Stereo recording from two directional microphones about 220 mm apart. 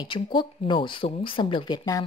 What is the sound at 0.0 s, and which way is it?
A woman's voice, 20° left (ahead or behind).